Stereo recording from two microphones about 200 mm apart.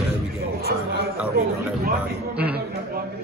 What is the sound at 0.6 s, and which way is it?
Speech, 50° right (ahead or behind).